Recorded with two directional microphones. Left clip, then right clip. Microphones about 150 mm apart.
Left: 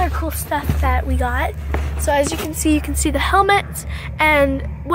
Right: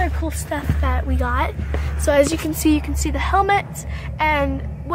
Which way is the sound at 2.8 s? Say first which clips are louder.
Left 5 dB; 15° left (ahead or behind).